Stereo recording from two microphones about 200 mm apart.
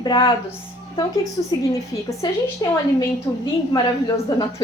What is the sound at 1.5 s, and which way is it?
Speech, 15° left (ahead or behind).